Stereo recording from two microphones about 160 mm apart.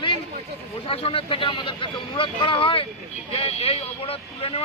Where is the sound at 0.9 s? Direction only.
35° left (ahead or behind).